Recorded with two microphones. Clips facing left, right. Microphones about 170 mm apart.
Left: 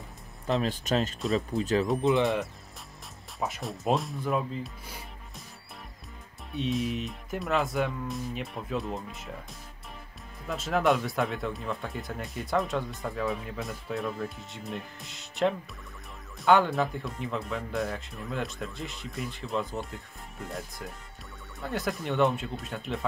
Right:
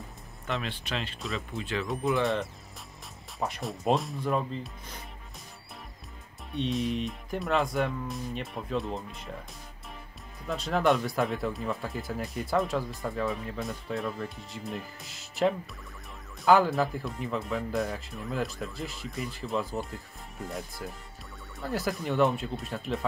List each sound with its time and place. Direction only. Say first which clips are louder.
0.5 s speech: left 6 dB; 40° left (ahead or behind)
1.2 s speech: left 7 dB; centre (ahead or behind)
1.6 s speech: left 6 dB; 40° left (ahead or behind)
2.0 s speech: left 1 dB; 25° left (ahead or behind)
3.3 s speech: even; centre (ahead or behind)
6.5 s speech: even; centre (ahead or behind)
10.4 s speech: even; centre (ahead or behind)